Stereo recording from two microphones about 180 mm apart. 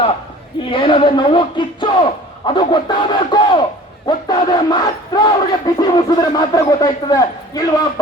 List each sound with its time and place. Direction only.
0.7 s speech: 30° left (ahead or behind)